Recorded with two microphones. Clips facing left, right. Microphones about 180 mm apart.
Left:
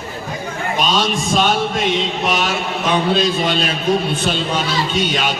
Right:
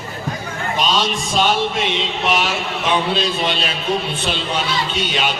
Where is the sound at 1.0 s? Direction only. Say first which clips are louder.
Left 2 dB; 50° left (ahead or behind).